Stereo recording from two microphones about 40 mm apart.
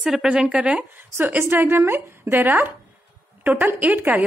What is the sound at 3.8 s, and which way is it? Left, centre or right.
Speech, right.